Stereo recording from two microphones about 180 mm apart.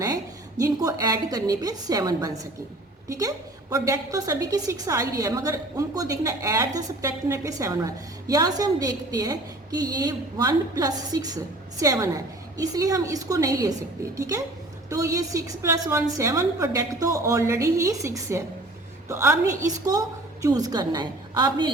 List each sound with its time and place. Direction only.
0.0 s a woman's voice: 20° right (ahead or behind)